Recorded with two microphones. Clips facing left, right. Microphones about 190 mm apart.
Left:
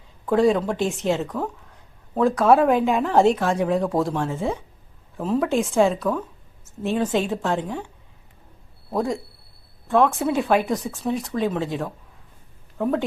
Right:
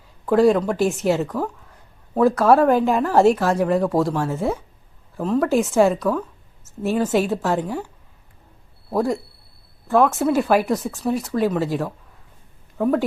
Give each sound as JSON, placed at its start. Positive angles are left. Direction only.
{"t": 0.3, "sound": "speech", "side_deg": 0}
{"t": 8.9, "sound": "speech", "side_deg": 0}